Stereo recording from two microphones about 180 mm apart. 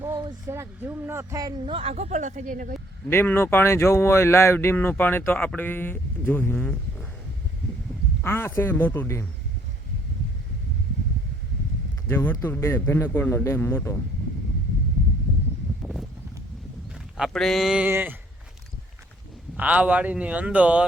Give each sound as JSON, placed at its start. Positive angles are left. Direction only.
{"t": 0.0, "sound": "speech", "side_deg": -20}
{"t": 1.6, "sound": "speech", "side_deg": -30}
{"t": 3.1, "sound": "speech", "side_deg": 15}
{"t": 8.2, "sound": "speech", "side_deg": 10}
{"t": 12.0, "sound": "speech", "side_deg": 10}
{"t": 17.2, "sound": "speech", "side_deg": 0}
{"t": 19.5, "sound": "speech", "side_deg": -10}